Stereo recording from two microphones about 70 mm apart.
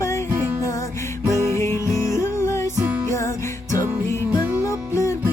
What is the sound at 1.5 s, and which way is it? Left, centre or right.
Music, left.